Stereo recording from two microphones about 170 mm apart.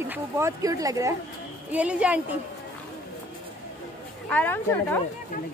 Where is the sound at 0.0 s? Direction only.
15° right (ahead or behind).